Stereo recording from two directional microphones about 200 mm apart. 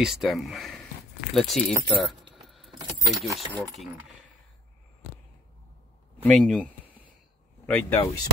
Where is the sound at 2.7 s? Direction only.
20° right (ahead or behind).